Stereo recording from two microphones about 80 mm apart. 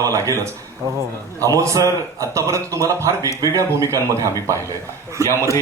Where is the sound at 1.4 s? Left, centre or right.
Right.